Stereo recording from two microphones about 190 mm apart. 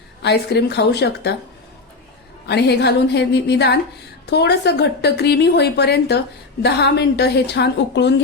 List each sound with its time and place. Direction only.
0.2 s a woman's voice: 65° left (ahead or behind)
2.5 s a woman's voice: 60° left (ahead or behind)